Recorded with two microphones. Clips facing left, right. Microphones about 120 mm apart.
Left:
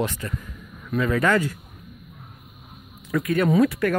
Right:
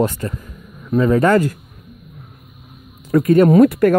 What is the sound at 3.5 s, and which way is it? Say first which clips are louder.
Speech: right 8 dB; 50° right (ahead or behind).